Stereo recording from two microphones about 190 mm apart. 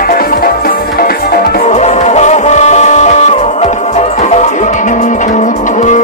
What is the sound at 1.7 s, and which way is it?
Music, 35° left (ahead or behind).